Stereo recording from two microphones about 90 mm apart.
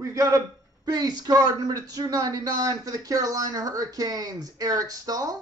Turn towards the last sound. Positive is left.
turn(degrees=-45)  # may be behind; listen again after turning